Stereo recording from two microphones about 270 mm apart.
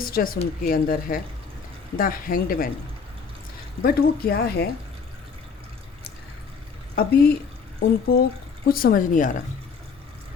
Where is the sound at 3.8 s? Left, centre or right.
Left.